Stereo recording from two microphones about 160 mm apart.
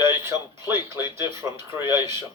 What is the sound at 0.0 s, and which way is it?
Speech, 15° right (ahead or behind).